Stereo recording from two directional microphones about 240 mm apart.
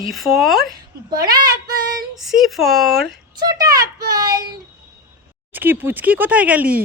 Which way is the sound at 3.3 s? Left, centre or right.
Centre.